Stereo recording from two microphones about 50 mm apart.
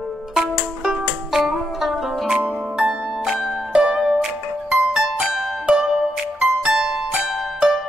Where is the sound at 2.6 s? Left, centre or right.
Centre.